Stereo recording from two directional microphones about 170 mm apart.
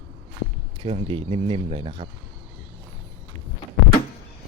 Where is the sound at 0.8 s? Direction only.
35° right (ahead or behind).